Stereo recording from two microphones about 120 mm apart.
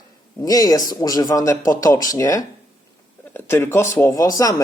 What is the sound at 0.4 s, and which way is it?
Speech, 30° left (ahead or behind).